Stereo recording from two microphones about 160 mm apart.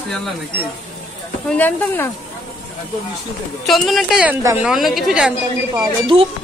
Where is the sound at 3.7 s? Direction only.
Centre (ahead or behind).